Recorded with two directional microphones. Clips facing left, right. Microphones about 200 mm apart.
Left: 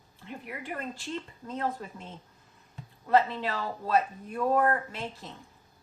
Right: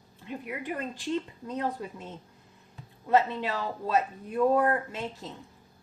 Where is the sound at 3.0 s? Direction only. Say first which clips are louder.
Even; 20° right (ahead or behind).